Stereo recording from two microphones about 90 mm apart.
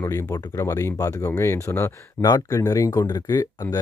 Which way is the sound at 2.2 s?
45° left (ahead or behind).